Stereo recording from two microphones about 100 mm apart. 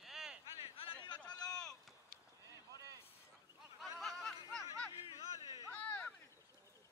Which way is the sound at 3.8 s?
Centre (ahead or behind).